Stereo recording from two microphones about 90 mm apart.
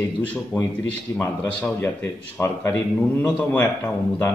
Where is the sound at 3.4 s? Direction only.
15° left (ahead or behind).